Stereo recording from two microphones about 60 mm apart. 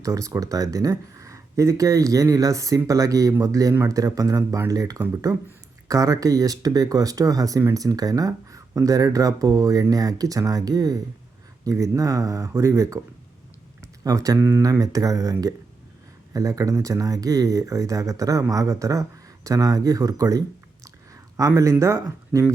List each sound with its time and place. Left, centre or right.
0.0 s speech: right
8.3 s speech: right
9.9 s speech: right
11.6 s speech: right
14.0 s speech: right
14.6 s speech: right
16.3 s speech: right
21.3 s speech: right